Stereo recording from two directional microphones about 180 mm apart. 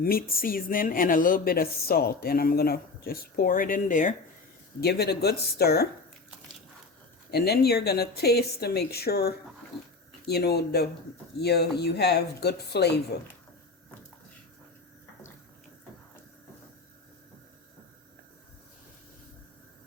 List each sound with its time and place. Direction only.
0.0 s speech: 55° left (ahead or behind)
4.8 s speech: 65° left (ahead or behind)
7.3 s speech: 60° left (ahead or behind)